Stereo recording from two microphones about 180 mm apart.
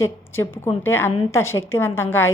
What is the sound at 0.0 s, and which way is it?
A woman's voice, 15° left (ahead or behind).